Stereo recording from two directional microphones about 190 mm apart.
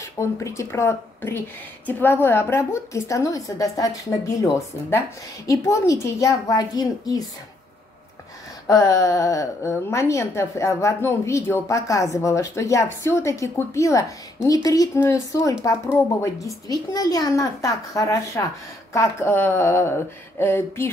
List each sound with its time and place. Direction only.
0.2 s a woman's voice: 15° left (ahead or behind)
8.6 s a woman's voice: 20° left (ahead or behind)